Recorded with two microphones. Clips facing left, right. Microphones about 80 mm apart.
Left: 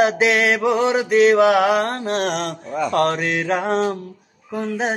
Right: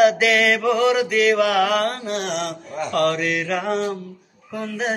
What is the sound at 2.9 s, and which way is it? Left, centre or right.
Speech, left.